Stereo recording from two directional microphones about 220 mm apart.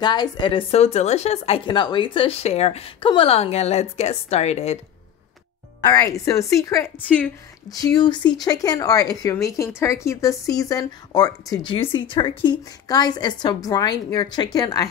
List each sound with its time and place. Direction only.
0.0 s a woman's voice: 20° left (ahead or behind)
5.9 s a woman's voice: 15° left (ahead or behind)